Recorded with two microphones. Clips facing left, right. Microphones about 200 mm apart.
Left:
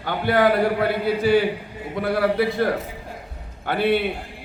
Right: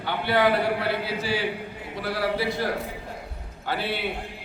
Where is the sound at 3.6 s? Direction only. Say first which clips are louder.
Left 9 dB; 55° left (ahead or behind).